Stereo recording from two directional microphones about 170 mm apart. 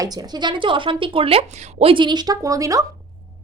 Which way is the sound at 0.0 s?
20° right (ahead or behind).